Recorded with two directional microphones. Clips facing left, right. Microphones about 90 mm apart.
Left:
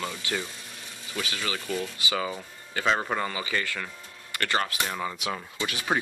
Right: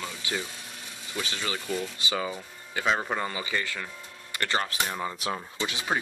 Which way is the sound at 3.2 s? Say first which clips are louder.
Left 1 dB; 20° right (ahead or behind).